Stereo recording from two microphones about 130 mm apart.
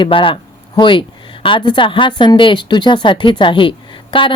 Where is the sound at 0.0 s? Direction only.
40° left (ahead or behind).